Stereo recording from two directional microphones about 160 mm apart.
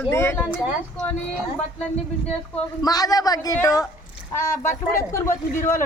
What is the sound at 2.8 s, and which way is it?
Speech, 25° left (ahead or behind).